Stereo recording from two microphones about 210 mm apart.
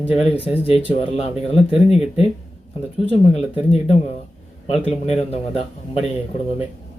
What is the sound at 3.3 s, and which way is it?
Speech, 30° left (ahead or behind).